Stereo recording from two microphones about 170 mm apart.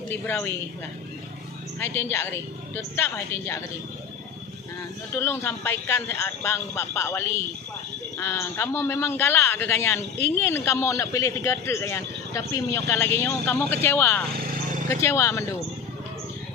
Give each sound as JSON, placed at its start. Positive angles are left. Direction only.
{"t": 0.1, "sound": "a man's voice", "side_deg": 10}
{"t": 1.8, "sound": "a man's voice", "side_deg": 15}
{"t": 5.1, "sound": "a man's voice", "side_deg": 15}
{"t": 14.4, "sound": "vehicle", "side_deg": -50}
{"t": 14.9, "sound": "a man's voice", "side_deg": 15}